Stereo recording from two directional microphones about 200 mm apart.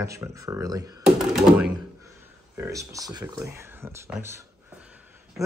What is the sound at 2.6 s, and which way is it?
Speech, 15° right (ahead or behind).